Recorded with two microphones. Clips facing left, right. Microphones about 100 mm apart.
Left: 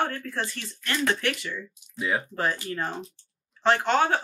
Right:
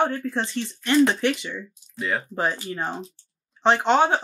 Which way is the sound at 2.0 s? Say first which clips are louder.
Right 1 dB; 5° left (ahead or behind).